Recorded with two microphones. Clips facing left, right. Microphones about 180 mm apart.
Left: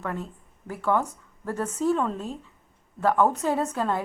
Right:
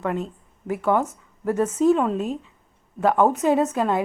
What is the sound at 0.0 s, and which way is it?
A woman's voice, 20° right (ahead or behind).